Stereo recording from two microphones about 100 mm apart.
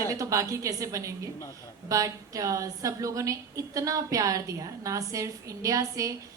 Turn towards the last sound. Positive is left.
turn(degrees=-35)  # may be behind; listen again after turning